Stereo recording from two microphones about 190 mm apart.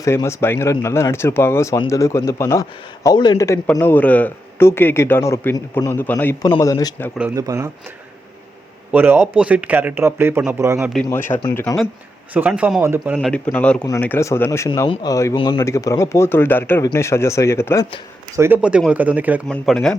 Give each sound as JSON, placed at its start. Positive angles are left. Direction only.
{"t": 0.0, "sound": "speech", "side_deg": 15}
{"t": 7.2, "sound": "speech", "side_deg": -15}
{"t": 8.9, "sound": "speech", "side_deg": -10}
{"t": 11.1, "sound": "speech", "side_deg": 10}
{"t": 12.3, "sound": "speech", "side_deg": -5}
{"t": 13.1, "sound": "speech", "side_deg": 5}
{"t": 18.3, "sound": "speech", "side_deg": -10}
{"t": 19.5, "sound": "speech", "side_deg": 5}